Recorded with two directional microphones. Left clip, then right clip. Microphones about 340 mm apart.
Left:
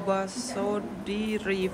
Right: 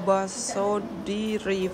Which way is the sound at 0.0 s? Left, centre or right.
Centre.